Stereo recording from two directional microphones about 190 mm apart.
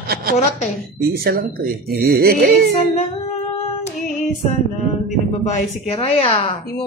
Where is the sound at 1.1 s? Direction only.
50° right (ahead or behind).